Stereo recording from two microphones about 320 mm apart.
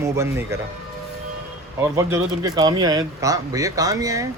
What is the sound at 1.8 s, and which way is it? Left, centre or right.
A man's voice, centre.